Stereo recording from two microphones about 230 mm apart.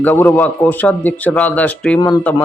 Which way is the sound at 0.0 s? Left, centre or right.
Centre.